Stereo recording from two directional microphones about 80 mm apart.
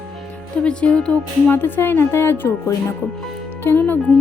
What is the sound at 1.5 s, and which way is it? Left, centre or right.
A woman's voice, left.